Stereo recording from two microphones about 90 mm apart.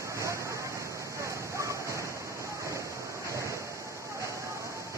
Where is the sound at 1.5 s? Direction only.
35° right (ahead or behind).